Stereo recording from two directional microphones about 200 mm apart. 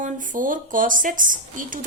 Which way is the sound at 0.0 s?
40° right (ahead or behind).